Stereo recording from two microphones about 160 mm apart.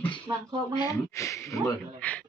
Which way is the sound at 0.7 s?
25° left (ahead or behind).